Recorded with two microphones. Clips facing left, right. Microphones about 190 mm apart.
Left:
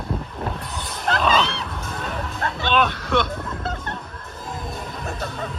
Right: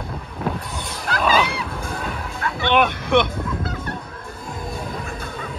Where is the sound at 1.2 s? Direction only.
10° right (ahead or behind).